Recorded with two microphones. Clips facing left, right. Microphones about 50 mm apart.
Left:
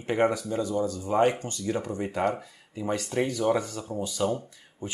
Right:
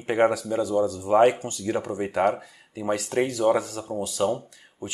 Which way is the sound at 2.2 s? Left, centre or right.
Right.